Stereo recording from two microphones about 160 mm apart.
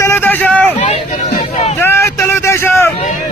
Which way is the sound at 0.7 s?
40° left (ahead or behind).